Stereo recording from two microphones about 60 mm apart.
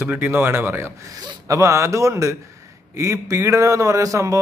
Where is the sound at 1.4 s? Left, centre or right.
Right.